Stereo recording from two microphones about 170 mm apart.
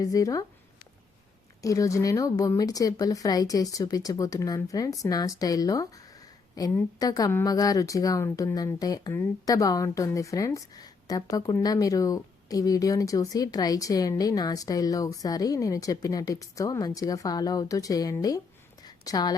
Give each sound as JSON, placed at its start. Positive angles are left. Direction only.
{"t": 0.0, "sound": "speech", "side_deg": 20}
{"t": 1.6, "sound": "speech", "side_deg": 20}
{"t": 18.8, "sound": "a sound", "side_deg": 25}